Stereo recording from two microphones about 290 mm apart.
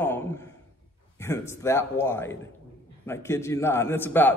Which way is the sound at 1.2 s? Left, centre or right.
Centre.